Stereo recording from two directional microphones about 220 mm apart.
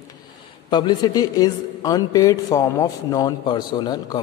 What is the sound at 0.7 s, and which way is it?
A man's voice, 20° left (ahead or behind).